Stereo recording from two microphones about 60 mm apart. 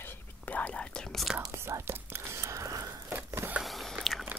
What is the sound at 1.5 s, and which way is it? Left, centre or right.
Whispering, right.